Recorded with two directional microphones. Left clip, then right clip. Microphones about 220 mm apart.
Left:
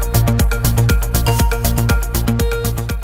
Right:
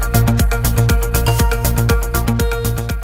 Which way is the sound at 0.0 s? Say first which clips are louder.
Right 1 dB; centre (ahead or behind).